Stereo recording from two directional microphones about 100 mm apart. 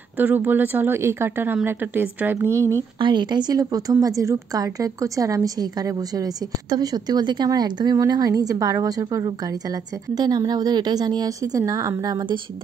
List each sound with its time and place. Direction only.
0.2 s speech: 20° right (ahead or behind)
2.4 s speech: 30° right (ahead or behind)
3.0 s a woman's voice: 50° right (ahead or behind)